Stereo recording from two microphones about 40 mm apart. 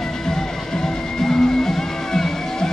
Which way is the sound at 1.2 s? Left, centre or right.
Centre.